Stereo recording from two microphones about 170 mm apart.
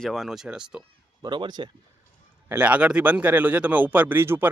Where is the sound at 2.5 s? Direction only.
10° right (ahead or behind).